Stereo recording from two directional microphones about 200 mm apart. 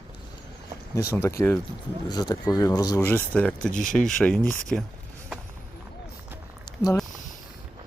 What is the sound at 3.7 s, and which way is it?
Speech, 40° left (ahead or behind).